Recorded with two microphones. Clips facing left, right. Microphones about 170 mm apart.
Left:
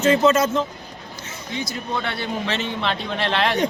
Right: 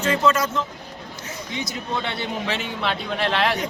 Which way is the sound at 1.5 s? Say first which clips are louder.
Left 2 dB; 20° right (ahead or behind).